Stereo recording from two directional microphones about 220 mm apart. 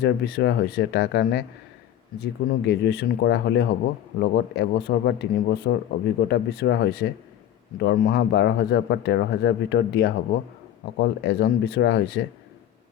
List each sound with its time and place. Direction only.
0.0 s speech: 50° left (ahead or behind)